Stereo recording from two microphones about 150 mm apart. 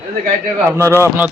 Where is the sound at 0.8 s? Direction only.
15° left (ahead or behind).